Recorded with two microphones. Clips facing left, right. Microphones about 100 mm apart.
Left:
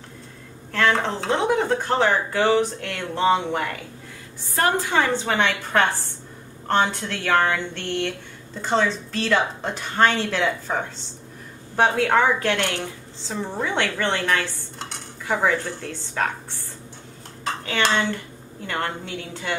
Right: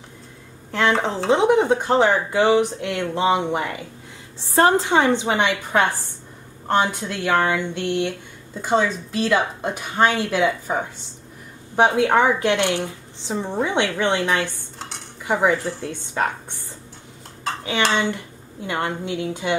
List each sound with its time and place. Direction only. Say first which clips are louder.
0.7 s speech: right 1 dB; 20° right (ahead or behind)
4.4 s a woman's voice: right 5 dB; 25° right (ahead or behind)
14.8 s cutlery: even; centre (ahead or behind)
15.2 s speech: right 3 dB; 15° right (ahead or behind)
15.6 s a woman's voice: right 3 dB; 5° right (ahead or behind)
17.9 s speech: right 1 dB; 15° right (ahead or behind)